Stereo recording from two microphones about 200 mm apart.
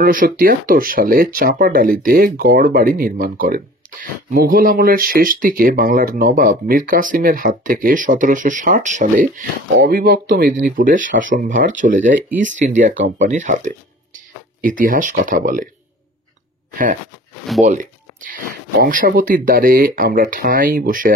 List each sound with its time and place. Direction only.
0.0 s speech: 45° right (ahead or behind)
17.6 s speech: 40° right (ahead or behind)